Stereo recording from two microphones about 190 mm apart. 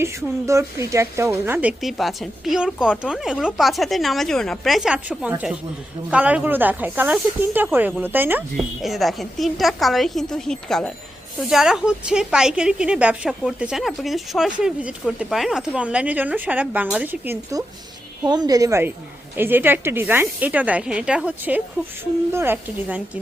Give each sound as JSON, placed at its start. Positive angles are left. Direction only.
{"t": 0.0, "sound": "a woman's voice", "side_deg": -15}